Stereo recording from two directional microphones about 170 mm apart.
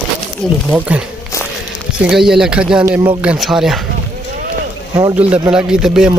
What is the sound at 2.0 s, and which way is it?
Speech, 5° right (ahead or behind).